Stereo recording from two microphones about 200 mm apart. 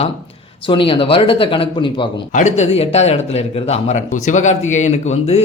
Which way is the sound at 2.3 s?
40° left (ahead or behind).